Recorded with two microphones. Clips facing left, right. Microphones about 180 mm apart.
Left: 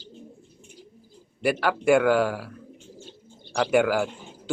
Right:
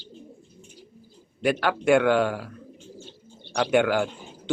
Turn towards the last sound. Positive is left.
turn(degrees=5)  # may be behind; listen again after turning